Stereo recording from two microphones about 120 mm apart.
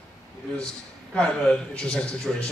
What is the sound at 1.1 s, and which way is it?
A man's voice, 10° left (ahead or behind).